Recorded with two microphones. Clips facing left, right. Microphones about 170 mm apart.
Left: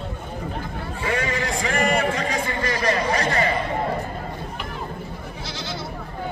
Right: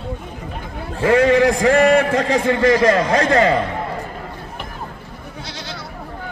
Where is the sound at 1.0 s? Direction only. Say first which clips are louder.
Right 13 dB; 85° right.